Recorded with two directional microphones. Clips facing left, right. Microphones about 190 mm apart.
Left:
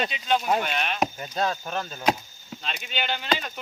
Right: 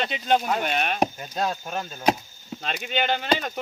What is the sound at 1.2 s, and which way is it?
Speech, centre (ahead or behind).